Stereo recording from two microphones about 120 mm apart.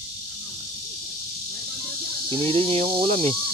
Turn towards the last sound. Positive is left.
turn(degrees=-50)  # may be behind; listen again after turning